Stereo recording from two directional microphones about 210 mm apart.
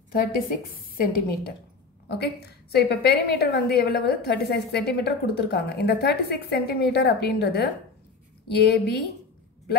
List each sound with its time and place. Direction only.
0.1 s a woman's voice: 45° left (ahead or behind)